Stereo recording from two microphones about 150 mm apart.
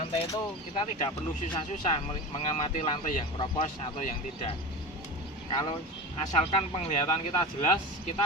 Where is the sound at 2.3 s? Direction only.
45° left (ahead or behind).